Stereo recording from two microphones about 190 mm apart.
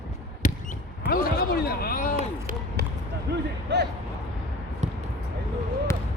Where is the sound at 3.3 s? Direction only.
60° right (ahead or behind).